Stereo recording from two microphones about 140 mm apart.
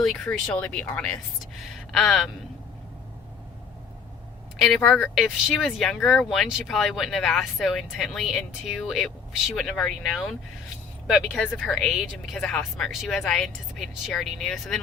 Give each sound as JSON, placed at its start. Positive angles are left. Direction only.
{"t": 0.0, "sound": "speech", "side_deg": 0}
{"t": 4.5, "sound": "speech", "side_deg": 0}
{"t": 5.1, "sound": "speech", "side_deg": 0}